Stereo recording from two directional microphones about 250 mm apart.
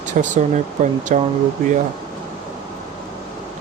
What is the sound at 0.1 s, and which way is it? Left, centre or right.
Speech, right.